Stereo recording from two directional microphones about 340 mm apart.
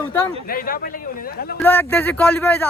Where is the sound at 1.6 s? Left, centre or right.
Centre.